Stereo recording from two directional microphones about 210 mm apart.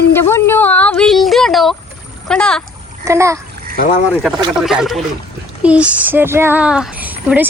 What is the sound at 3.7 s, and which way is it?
Speech, 45° left (ahead or behind).